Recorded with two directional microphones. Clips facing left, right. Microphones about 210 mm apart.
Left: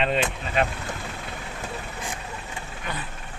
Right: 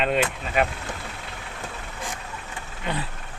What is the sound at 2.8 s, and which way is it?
Speech, 30° right (ahead or behind).